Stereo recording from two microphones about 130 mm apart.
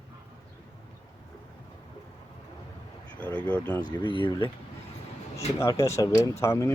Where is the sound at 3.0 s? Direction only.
10° left (ahead or behind).